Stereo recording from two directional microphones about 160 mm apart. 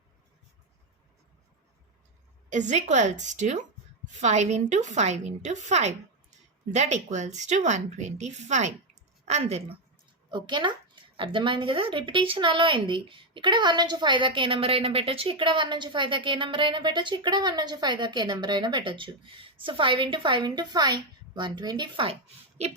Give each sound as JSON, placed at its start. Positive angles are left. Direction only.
{"t": 2.5, "sound": "a woman's voice", "side_deg": -50}
{"t": 10.3, "sound": "a woman's voice", "side_deg": -30}